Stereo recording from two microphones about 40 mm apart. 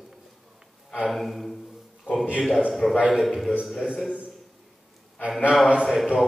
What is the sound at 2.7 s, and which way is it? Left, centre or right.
Speech, centre.